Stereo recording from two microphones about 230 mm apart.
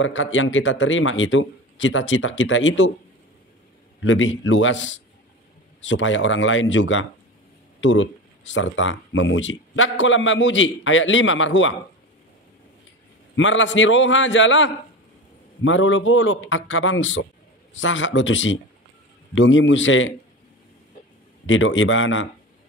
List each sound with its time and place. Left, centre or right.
0.0 s a man's voice: left
4.0 s a man's voice: left
13.4 s a man's voice: left
21.5 s a man's voice: left